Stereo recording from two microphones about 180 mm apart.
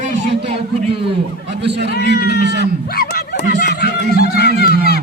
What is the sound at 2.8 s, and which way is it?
Snicker, 60° left (ahead or behind).